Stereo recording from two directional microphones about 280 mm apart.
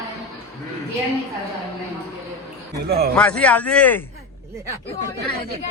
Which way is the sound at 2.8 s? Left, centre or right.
Right.